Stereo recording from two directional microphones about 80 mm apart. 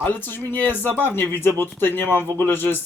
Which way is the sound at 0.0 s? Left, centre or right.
Left.